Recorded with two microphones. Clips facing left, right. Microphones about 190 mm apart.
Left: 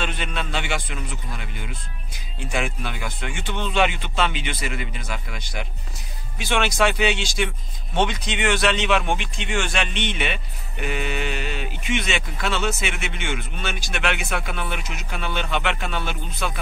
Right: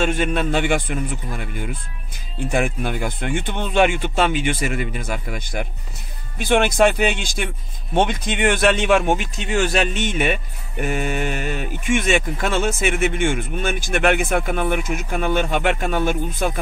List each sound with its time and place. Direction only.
0.0 s speech: 45° right (ahead or behind)